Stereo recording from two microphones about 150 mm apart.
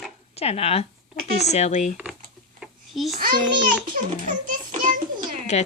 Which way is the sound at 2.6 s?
Centre (ahead or behind).